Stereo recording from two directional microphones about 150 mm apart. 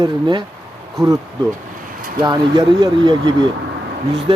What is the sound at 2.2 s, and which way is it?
Speech, 30° right (ahead or behind).